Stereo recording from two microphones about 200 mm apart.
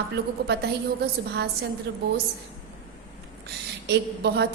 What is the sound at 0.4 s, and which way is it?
Speech, 55° right (ahead or behind).